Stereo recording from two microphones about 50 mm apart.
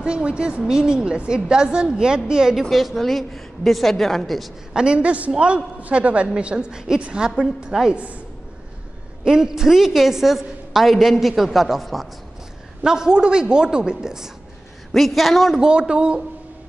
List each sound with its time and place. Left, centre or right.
0.0 s a woman's voice: centre
2.7 s a woman's voice: centre
4.7 s a man's voice: centre
7.9 s a man's voice: right
9.2 s a woman's voice: centre
12.8 s a woman's voice: centre
14.9 s a woman's voice: centre
15.6 s a woman's voice: centre